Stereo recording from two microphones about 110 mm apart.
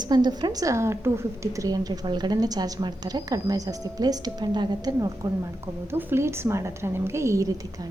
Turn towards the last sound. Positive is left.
turn(degrees=-25)  # may be behind; listen again after turning